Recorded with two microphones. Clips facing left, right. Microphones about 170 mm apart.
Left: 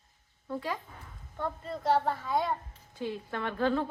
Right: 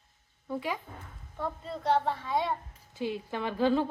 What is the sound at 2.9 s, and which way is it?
Speech, 15° right (ahead or behind).